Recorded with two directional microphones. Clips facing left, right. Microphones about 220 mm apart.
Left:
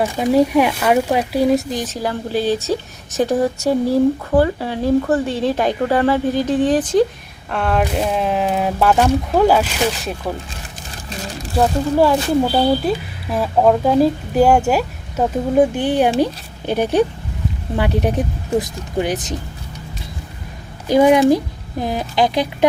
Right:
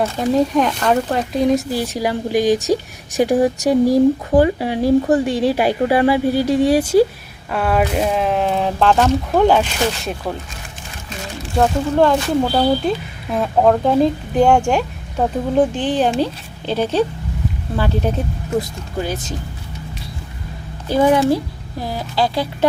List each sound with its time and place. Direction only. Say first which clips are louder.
0.0 s speech: left 2 dB; 10° left (ahead or behind)
1.7 s speech: right 2 dB; 10° right (ahead or behind); by 10.2 s 5° left (ahead or behind)
11.5 s speech: even; 5° left (ahead or behind)
18.5 s speech: left 2 dB; 30° left (ahead or behind)
18.9 s speech: left 3 dB; 20° left (ahead or behind)
20.8 s speech: left 3 dB; 15° left (ahead or behind)